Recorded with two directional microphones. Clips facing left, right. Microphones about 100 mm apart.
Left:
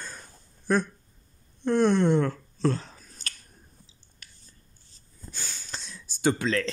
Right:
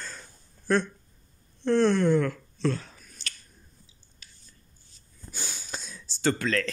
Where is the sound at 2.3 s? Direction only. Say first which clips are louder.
Left 2 dB; 35° left (ahead or behind).